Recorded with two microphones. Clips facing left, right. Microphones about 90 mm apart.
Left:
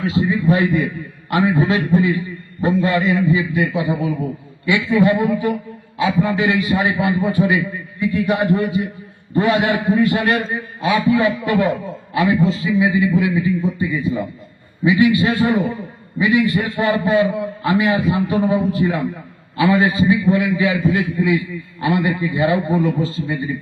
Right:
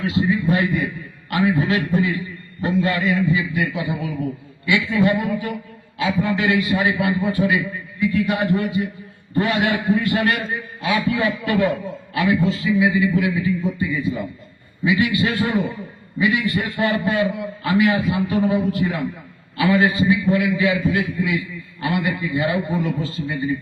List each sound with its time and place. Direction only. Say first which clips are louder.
0.0 s a man's voice: left 2 dB; 30° left (ahead or behind)
15.3 s a man's voice: left 4 dB; 35° left (ahead or behind)